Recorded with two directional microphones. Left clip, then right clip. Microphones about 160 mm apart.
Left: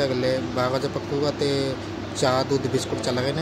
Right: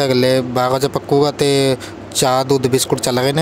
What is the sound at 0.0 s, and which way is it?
Speech, 75° right (ahead or behind).